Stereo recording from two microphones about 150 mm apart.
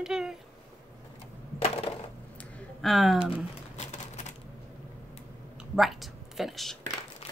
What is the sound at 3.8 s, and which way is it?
Typewriter, 50° left (ahead or behind).